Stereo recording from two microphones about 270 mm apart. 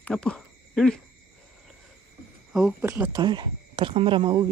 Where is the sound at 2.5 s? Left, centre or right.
Centre.